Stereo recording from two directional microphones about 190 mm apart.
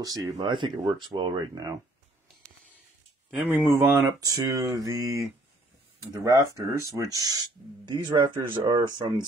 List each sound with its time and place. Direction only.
0.4 s speech: 25° right (ahead or behind)
3.3 s speech: 10° right (ahead or behind)